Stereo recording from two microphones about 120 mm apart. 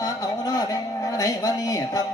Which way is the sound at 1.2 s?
30° left (ahead or behind).